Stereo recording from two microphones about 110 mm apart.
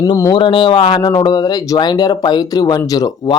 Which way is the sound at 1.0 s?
40° left (ahead or behind).